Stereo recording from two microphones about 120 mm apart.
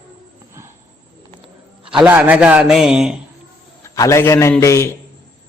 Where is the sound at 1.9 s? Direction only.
10° right (ahead or behind).